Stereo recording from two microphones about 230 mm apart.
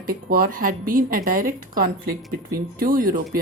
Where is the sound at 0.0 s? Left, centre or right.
Right.